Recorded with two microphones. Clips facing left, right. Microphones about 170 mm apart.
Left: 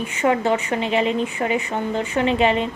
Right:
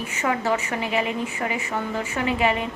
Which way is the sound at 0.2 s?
30° left (ahead or behind).